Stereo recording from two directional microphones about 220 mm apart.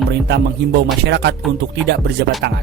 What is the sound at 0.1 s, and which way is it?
Speech, 50° right (ahead or behind).